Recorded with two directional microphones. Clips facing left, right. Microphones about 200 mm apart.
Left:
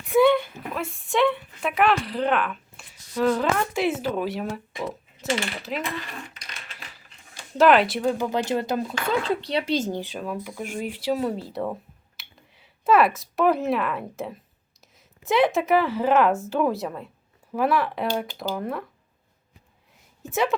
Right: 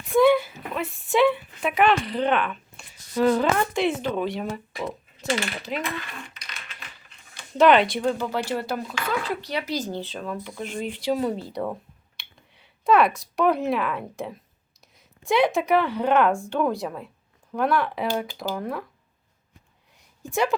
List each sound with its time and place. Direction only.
0.0 s a sound: centre (ahead or behind)
0.8 s speech: centre (ahead or behind)
5.8 s a sound: 35° left (ahead or behind)
7.6 s speech: centre (ahead or behind)
8.2 s speech: 20° left (ahead or behind)
9.9 s speech: 15° left (ahead or behind)
20.2 s speech: centre (ahead or behind)